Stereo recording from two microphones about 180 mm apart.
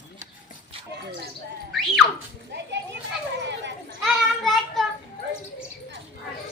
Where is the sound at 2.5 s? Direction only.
75° right (ahead or behind).